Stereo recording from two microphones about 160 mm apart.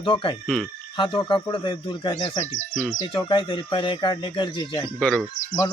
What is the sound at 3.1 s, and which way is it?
Speech, 30° left (ahead or behind).